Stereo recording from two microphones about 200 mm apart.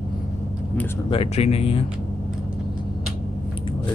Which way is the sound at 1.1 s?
30° left (ahead or behind).